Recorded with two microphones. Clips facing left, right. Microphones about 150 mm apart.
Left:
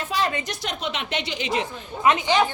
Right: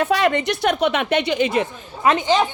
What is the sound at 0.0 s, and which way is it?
A woman's voice, 70° right (ahead or behind).